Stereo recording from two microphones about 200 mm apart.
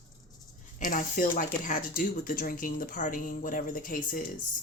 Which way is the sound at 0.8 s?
40° left (ahead or behind).